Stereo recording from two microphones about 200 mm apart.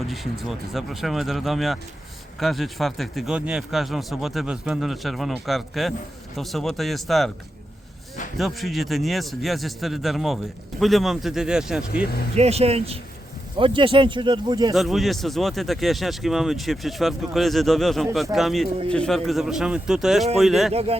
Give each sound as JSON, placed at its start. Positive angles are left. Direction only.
{"t": 0.1, "sound": "speech", "side_deg": 0}
{"t": 8.4, "sound": "speech", "side_deg": 0}
{"t": 12.4, "sound": "speech", "side_deg": -30}
{"t": 14.7, "sound": "speech", "side_deg": 0}